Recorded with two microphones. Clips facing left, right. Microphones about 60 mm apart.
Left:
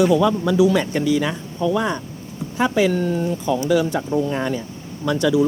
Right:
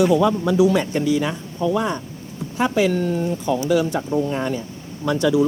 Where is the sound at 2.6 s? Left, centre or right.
Centre.